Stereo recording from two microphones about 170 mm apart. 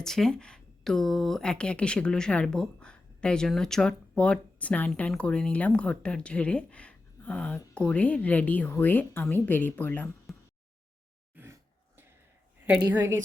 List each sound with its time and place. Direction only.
0.0 s speech: centre (ahead or behind)
10.3 s a sound: centre (ahead or behind)
12.8 s a woman's voice: 15° right (ahead or behind)